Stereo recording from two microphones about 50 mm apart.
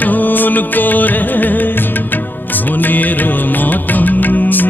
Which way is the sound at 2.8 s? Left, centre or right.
Left.